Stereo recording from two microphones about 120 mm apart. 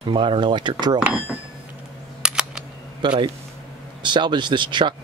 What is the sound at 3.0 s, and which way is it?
Speech, 40° right (ahead or behind).